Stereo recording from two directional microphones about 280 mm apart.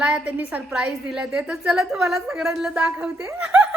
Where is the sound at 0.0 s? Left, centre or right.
Centre.